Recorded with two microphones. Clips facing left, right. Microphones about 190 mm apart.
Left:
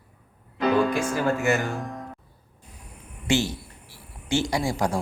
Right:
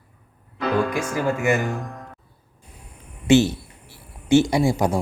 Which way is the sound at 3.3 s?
20° right (ahead or behind).